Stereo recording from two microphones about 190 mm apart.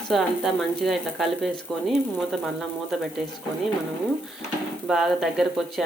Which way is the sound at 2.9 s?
Centre (ahead or behind).